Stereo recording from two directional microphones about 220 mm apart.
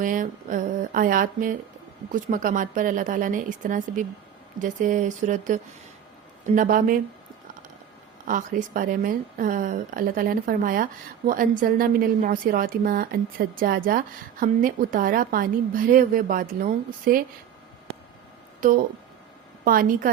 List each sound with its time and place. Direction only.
0.0 s a woman's voice: 35° right (ahead or behind)
8.3 s a woman's voice: 35° right (ahead or behind)
18.6 s a woman's voice: 35° right (ahead or behind)